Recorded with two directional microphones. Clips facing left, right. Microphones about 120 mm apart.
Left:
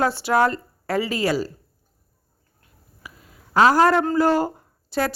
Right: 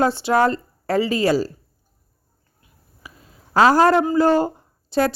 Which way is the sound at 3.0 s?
25° right (ahead or behind).